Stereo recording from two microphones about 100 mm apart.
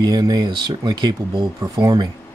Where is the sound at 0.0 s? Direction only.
45° right (ahead or behind).